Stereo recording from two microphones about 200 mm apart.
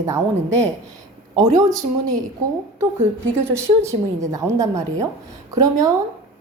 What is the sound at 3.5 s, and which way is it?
A woman's voice, 15° right (ahead or behind).